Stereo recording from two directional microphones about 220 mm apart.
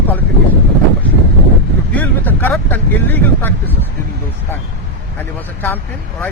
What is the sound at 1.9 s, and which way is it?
Speech, 10° left (ahead or behind).